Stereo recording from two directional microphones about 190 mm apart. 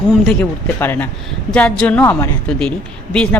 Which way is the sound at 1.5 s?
5° left (ahead or behind).